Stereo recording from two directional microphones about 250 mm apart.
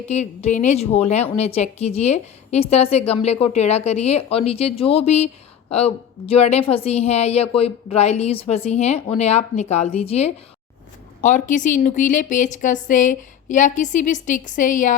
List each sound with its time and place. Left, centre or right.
0.1 s a woman's voice: left